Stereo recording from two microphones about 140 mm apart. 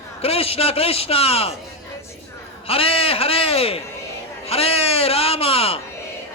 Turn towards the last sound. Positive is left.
turn(degrees=45)  # may be behind; listen again after turning